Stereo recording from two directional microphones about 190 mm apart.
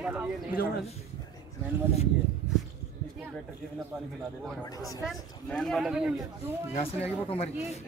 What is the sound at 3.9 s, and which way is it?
Speech, centre (ahead or behind).